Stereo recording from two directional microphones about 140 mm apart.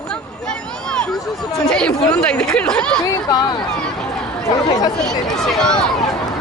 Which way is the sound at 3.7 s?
5° left (ahead or behind).